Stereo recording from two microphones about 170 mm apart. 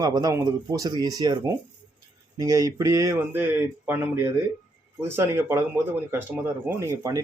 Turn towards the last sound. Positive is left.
turn(degrees=-20)  # may be behind; listen again after turning